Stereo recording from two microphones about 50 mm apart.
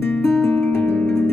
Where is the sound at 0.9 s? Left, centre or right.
Centre.